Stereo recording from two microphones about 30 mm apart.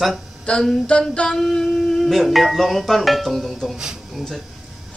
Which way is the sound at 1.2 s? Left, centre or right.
Centre.